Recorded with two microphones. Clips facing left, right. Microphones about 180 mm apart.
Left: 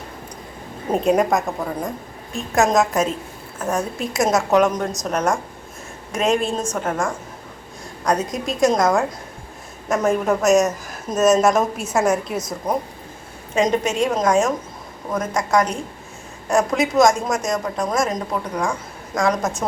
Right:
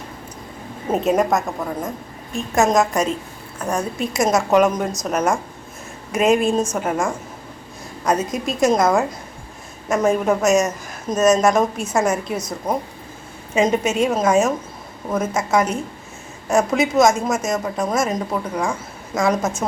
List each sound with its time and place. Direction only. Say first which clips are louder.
0.9 s a woman's voice: even; centre (ahead or behind)